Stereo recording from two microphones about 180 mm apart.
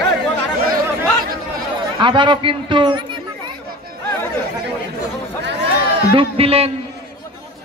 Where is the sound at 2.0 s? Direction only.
25° right (ahead or behind).